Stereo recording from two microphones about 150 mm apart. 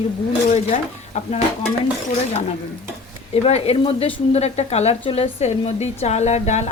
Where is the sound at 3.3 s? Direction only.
45° left (ahead or behind).